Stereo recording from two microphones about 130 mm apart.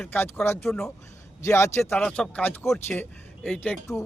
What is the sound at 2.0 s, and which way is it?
Speech, 10° left (ahead or behind).